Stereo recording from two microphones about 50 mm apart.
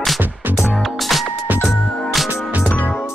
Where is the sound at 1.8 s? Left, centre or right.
Centre.